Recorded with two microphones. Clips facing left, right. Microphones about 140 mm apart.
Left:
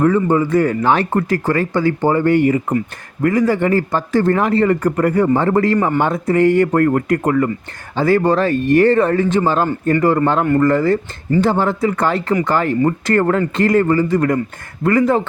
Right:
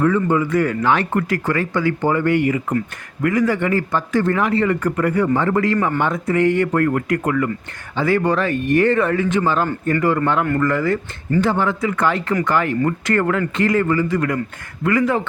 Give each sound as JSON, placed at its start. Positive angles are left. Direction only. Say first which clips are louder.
{"t": 0.0, "sound": "speech", "louder": "left 3 dB", "side_deg": 35}